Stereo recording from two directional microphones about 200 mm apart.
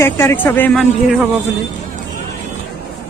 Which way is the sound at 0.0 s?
15° left (ahead or behind).